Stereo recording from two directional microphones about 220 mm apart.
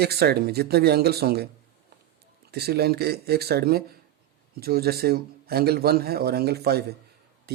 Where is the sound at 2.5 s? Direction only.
45° right (ahead or behind).